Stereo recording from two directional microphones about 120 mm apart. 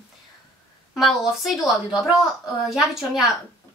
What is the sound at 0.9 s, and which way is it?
A woman's voice, centre (ahead or behind).